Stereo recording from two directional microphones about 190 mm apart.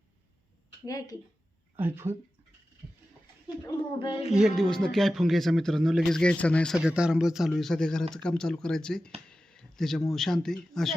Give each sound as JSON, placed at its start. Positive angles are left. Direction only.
{"t": 0.9, "sound": "speech", "side_deg": 20}
{"t": 1.7, "sound": "speech", "side_deg": -10}
{"t": 2.8, "sound": "a sound", "side_deg": -5}
{"t": 3.4, "sound": "speech", "side_deg": 25}
{"t": 4.3, "sound": "speech", "side_deg": 0}
{"t": 6.7, "sound": "speech", "side_deg": -5}
{"t": 9.3, "sound": "a sound", "side_deg": 5}
{"t": 10.1, "sound": "speech", "side_deg": 0}